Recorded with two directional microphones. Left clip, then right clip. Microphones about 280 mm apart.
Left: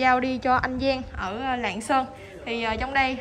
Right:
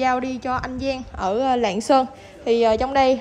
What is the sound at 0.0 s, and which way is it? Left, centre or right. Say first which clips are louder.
A woman's voice: even; centre.